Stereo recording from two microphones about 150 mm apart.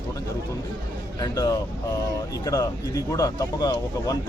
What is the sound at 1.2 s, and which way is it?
Speech, 25° left (ahead or behind).